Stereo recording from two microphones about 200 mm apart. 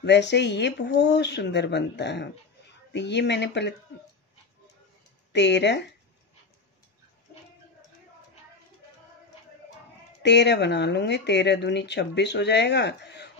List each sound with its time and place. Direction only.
0.0 s speech: 60° left (ahead or behind)
5.3 s speech: 60° left (ahead or behind)
10.2 s speech: 60° left (ahead or behind)